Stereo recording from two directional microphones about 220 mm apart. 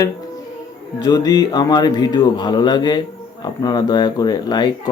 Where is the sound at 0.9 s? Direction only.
20° left (ahead or behind).